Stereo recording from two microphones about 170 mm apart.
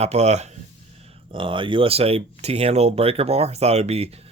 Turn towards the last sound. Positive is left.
turn(degrees=-35)  # may be behind; listen again after turning